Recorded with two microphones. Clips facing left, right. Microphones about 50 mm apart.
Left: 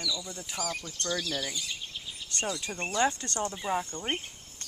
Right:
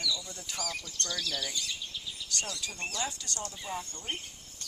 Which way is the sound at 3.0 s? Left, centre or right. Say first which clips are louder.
Left 13 dB; left.